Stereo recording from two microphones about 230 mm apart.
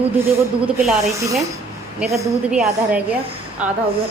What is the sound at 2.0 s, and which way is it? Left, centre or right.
Speech, centre.